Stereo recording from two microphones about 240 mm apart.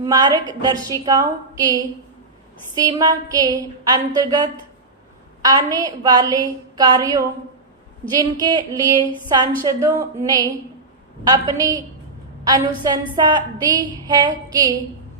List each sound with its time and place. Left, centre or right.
0.0 s a woman's voice: centre